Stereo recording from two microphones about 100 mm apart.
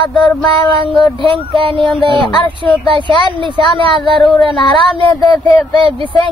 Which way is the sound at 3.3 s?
55° right (ahead or behind).